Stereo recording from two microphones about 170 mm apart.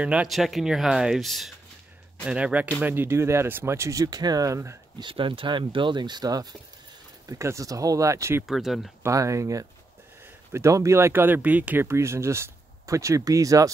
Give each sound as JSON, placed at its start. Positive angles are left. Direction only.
{"t": 0.0, "sound": "speech", "side_deg": -5}
{"t": 5.0, "sound": "speech", "side_deg": -30}
{"t": 8.5, "sound": "speech", "side_deg": 0}
{"t": 9.0, "sound": "speech", "side_deg": -20}